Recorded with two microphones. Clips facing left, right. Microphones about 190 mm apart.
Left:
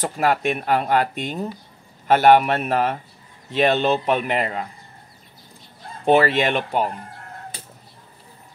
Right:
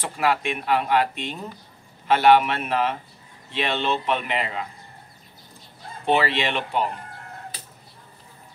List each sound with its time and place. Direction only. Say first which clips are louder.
0.0 s speech: left 3 dB; 45° left (ahead or behind)
6.0 s speech: left 5 dB; 45° left (ahead or behind)